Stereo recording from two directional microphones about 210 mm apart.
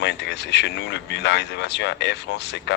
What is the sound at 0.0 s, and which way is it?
Speech, 55° left (ahead or behind).